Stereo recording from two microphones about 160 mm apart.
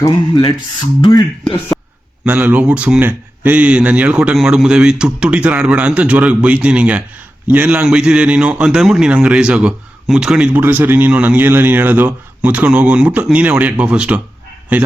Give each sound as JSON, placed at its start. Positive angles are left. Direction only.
{"t": 0.0, "sound": "speech", "side_deg": 25}
{"t": 2.2, "sound": "a man's voice", "side_deg": -10}